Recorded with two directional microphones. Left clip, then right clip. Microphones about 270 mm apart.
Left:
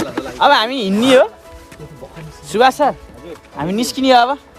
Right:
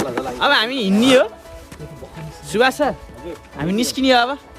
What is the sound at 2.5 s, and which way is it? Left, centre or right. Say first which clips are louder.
Speech: left 4 dB; centre.